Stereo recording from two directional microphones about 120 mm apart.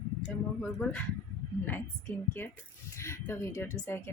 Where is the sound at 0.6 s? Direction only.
10° left (ahead or behind).